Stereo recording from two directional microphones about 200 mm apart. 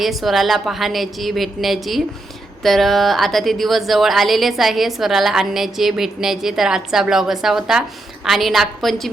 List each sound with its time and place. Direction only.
0.0 s speech: centre (ahead or behind)